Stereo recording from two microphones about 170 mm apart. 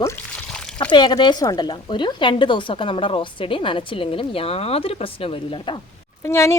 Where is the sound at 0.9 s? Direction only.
25° left (ahead or behind).